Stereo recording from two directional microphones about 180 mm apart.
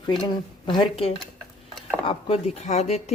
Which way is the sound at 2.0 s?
35° left (ahead or behind).